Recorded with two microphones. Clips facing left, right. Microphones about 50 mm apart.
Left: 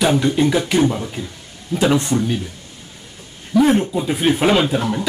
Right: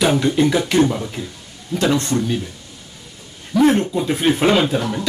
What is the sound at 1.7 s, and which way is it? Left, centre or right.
Speech, centre.